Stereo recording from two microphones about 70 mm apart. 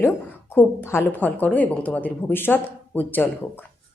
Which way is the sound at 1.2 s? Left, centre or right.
Left.